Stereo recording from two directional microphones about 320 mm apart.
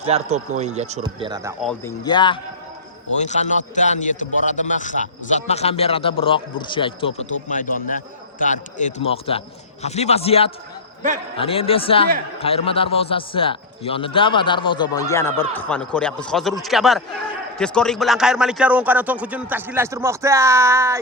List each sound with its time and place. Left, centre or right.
0.0 s speech: centre
1.8 s a man's voice: centre